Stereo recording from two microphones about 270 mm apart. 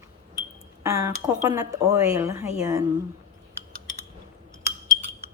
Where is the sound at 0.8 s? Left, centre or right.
Centre.